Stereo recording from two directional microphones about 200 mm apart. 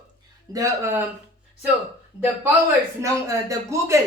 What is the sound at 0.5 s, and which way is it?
Speech, 15° right (ahead or behind).